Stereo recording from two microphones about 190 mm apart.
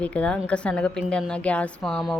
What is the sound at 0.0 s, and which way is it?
A woman's voice, 5° left (ahead or behind).